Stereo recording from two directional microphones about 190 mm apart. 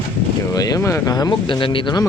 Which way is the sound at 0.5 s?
20° left (ahead or behind).